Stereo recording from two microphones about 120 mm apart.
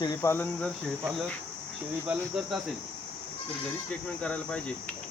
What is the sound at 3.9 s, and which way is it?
Speech, 10° left (ahead or behind).